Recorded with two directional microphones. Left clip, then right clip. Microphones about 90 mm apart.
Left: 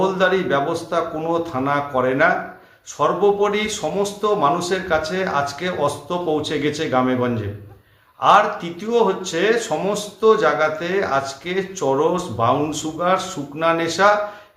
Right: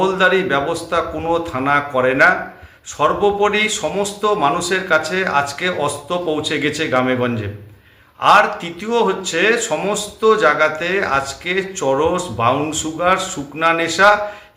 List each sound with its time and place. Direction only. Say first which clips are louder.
0.0 s speech: right 3 dB; 25° left (ahead or behind)